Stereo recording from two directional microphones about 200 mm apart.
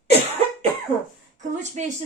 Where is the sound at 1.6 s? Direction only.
35° right (ahead or behind).